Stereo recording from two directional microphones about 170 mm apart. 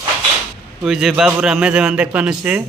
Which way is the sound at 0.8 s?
5° right (ahead or behind).